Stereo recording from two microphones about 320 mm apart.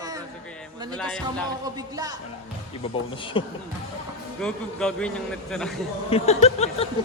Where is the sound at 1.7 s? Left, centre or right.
Centre.